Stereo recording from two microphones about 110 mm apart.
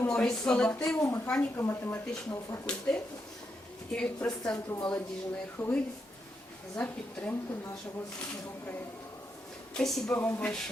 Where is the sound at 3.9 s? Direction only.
10° left (ahead or behind).